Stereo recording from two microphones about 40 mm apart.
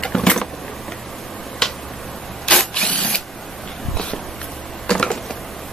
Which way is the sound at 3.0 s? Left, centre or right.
Left.